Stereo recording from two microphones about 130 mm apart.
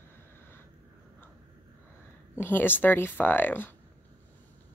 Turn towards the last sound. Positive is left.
turn(degrees=15)  # may be behind; listen again after turning